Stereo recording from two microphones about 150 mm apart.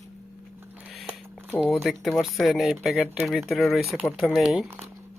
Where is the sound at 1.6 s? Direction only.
Centre (ahead or behind).